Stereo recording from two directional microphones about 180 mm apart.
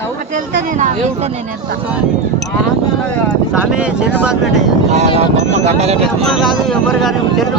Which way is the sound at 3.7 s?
5° right (ahead or behind).